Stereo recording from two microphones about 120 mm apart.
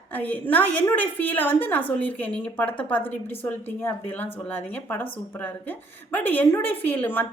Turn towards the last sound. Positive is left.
turn(degrees=15)  # may be behind; listen again after turning